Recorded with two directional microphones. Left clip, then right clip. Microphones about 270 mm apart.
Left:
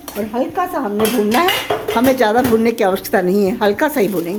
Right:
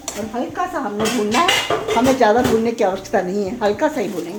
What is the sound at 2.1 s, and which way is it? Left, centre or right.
Speech, left.